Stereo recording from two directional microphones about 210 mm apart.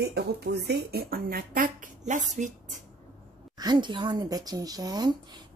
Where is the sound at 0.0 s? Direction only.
50° right (ahead or behind).